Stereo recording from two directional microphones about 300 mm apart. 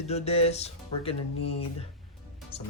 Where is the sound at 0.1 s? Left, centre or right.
Centre.